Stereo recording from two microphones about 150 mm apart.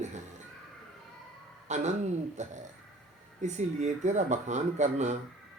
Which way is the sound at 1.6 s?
50° right (ahead or behind).